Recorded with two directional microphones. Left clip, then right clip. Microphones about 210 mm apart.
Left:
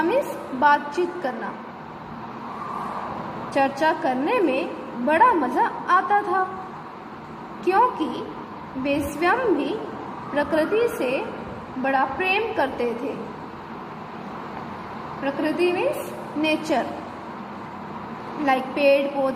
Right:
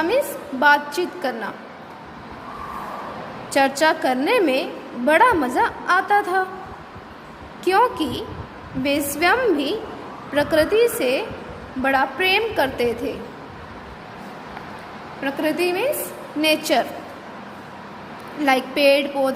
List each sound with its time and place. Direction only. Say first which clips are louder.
0.6 s a woman's voice: right 2 dB; 30° right (ahead or behind)
3.5 s a woman's voice: right 3 dB; 35° right (ahead or behind)
7.6 s a woman's voice: right 2 dB; 35° right (ahead or behind)
15.2 s a woman's voice: right 1 dB; 30° right (ahead or behind)
18.4 s a woman's voice: right 3 dB; 35° right (ahead or behind)